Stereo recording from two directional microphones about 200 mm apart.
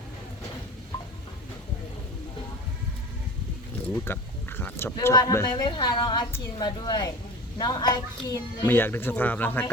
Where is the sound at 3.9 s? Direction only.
10° left (ahead or behind).